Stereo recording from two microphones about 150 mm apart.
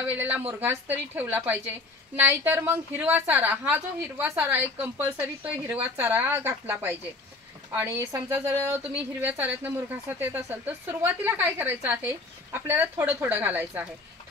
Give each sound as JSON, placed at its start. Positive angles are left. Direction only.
{"t": 0.2, "sound": "a woman's voice", "side_deg": -10}